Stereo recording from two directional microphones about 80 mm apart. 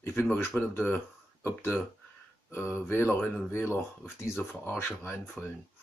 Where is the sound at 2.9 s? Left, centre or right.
Left.